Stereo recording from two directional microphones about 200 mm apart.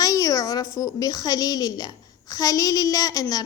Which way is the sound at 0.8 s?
15° left (ahead or behind).